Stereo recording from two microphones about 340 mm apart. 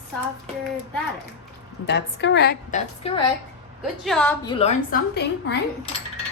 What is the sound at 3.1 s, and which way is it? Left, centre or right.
Speech, centre.